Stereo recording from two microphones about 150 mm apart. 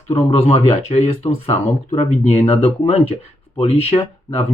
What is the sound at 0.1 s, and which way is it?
Speech, 45° left (ahead or behind).